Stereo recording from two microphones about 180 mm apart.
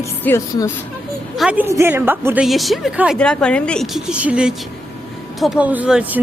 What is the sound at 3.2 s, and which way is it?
A woman's voice, 5° left (ahead or behind).